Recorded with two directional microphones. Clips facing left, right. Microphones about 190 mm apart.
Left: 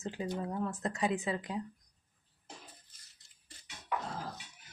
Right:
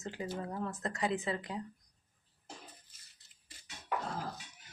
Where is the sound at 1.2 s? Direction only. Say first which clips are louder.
Left 1 dB; 15° left (ahead or behind).